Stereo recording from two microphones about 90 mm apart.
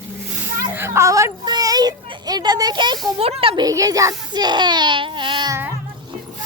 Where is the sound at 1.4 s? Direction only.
45° right (ahead or behind).